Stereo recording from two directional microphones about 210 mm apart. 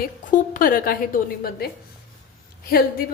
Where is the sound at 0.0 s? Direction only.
40° left (ahead or behind).